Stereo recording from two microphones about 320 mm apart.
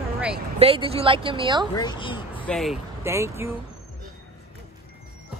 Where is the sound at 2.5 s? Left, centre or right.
Centre.